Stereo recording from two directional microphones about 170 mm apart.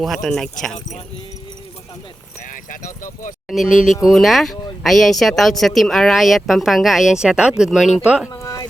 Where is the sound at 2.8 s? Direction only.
50° left (ahead or behind).